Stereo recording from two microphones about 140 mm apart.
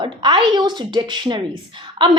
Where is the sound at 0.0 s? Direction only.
35° right (ahead or behind).